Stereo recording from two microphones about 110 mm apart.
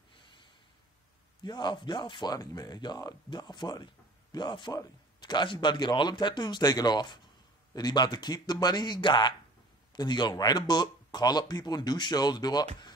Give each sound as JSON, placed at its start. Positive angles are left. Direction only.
{"t": 1.4, "sound": "speech", "side_deg": 40}